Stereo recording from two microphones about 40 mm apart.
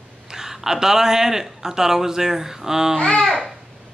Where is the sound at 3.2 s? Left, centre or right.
Centre.